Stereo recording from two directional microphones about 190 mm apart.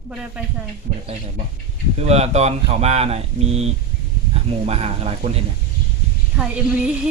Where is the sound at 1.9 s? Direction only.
35° right (ahead or behind).